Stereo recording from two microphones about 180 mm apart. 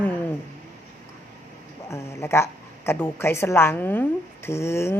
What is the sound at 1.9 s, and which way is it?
A woman's voice, 15° left (ahead or behind).